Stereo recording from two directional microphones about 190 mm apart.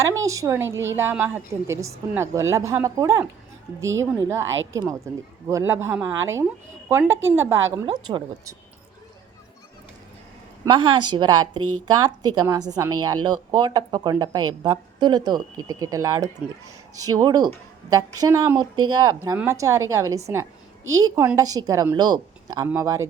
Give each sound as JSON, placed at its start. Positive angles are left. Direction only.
{"t": 0.3, "sound": "speech", "side_deg": -15}
{"t": 4.4, "sound": "a woman's voice", "side_deg": -85}
{"t": 5.5, "sound": "speech", "side_deg": -15}
{"t": 10.7, "sound": "speech", "side_deg": -25}